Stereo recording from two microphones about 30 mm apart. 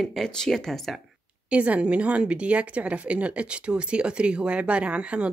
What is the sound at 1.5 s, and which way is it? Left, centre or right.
Speech, right.